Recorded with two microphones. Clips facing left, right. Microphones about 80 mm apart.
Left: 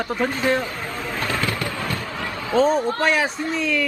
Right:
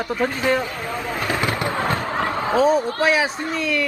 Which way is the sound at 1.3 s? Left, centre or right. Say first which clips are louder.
Right 4 dB; right.